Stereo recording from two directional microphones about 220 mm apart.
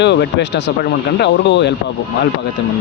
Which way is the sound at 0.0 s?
50° left (ahead or behind).